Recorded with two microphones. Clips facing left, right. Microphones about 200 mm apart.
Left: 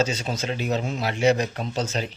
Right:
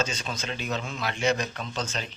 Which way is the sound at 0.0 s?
35° left (ahead or behind).